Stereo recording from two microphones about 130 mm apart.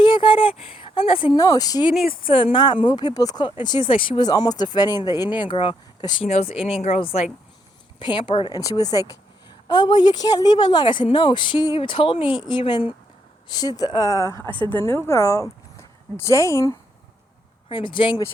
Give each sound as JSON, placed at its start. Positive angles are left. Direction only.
{"t": 0.0, "sound": "a sound", "side_deg": 40}
{"t": 1.4, "sound": "speech", "side_deg": 30}
{"t": 2.2, "sound": "speech", "side_deg": 40}
{"t": 4.3, "sound": "speech", "side_deg": 30}
{"t": 6.2, "sound": "speech", "side_deg": 55}
{"t": 7.9, "sound": "speech", "side_deg": 40}
{"t": 8.4, "sound": "speech", "side_deg": 30}
{"t": 14.4, "sound": "speech", "side_deg": -40}
{"t": 14.8, "sound": "speech", "side_deg": 20}
{"t": 17.7, "sound": "speech", "side_deg": 35}